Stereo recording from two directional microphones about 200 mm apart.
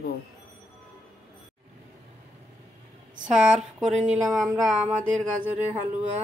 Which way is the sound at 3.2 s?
5° right (ahead or behind).